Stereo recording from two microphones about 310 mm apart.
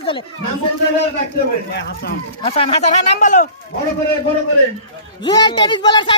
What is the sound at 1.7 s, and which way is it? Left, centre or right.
Speech, left.